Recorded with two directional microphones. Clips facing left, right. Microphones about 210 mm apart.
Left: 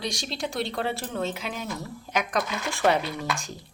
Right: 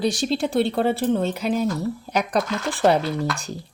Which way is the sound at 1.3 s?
35° right (ahead or behind).